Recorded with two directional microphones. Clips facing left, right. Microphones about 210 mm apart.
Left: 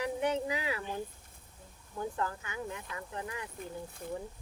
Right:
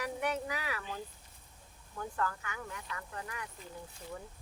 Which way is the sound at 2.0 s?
20° left (ahead or behind).